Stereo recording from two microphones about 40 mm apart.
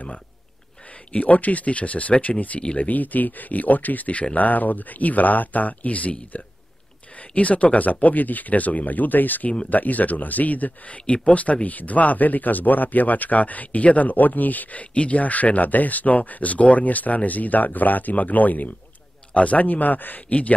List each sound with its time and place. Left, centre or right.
1.1 s speech: left
2.6 s speech: left
2.9 s speech: left